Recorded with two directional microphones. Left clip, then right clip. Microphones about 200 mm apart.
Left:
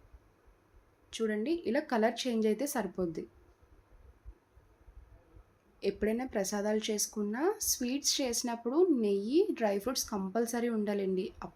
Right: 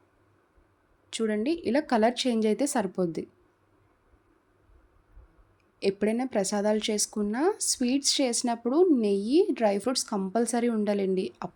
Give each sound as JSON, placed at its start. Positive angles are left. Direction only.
{"t": 1.1, "sound": "speech", "side_deg": -45}
{"t": 5.8, "sound": "speech", "side_deg": -45}